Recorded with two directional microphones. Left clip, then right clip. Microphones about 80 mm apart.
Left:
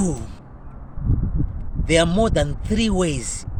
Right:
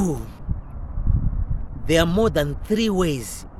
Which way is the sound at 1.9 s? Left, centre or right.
Right.